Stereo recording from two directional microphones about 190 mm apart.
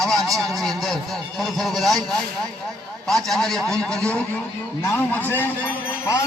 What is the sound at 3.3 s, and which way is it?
A man's voice, centre (ahead or behind).